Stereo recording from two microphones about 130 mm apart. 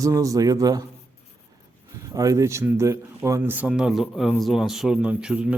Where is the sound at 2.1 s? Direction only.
25° right (ahead or behind).